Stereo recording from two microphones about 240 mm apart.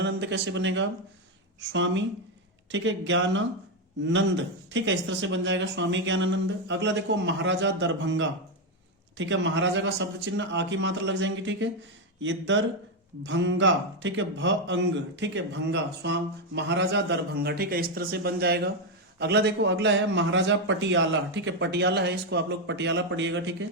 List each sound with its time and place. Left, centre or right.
0.0 s a man's voice: right